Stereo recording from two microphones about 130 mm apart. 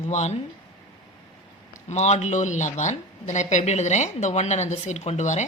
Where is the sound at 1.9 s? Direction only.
60° left (ahead or behind).